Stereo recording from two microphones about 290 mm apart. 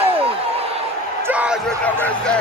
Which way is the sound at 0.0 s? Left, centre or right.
Centre.